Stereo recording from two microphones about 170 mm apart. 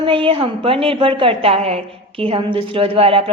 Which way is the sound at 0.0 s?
30° right (ahead or behind).